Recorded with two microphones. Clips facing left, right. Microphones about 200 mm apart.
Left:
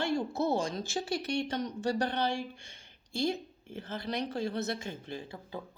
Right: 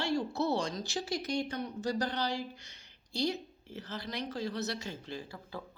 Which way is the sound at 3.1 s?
55° left (ahead or behind).